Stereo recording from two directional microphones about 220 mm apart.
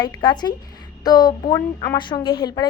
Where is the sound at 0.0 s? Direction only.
20° left (ahead or behind).